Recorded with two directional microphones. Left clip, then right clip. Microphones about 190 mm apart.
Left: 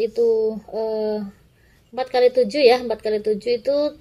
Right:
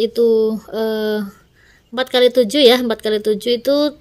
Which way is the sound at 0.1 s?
55° right (ahead or behind).